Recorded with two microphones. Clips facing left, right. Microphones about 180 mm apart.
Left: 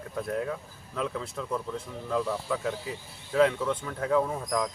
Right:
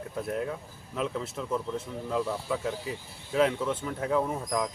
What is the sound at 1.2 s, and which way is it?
Speech, 5° right (ahead or behind).